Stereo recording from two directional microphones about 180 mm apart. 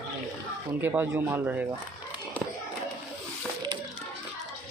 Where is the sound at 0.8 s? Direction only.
10° right (ahead or behind).